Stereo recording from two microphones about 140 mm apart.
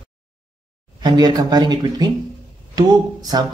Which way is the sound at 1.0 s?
30° right (ahead or behind).